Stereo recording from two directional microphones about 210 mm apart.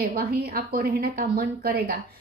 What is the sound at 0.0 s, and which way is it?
Speech, 45° right (ahead or behind).